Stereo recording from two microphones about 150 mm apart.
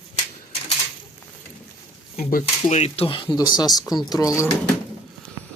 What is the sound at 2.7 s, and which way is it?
Speech, 45° left (ahead or behind).